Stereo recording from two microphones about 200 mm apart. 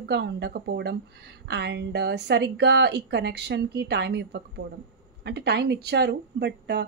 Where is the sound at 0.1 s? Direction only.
55° right (ahead or behind).